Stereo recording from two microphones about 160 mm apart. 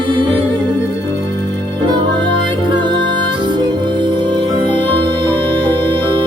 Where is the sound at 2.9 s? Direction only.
30° right (ahead or behind).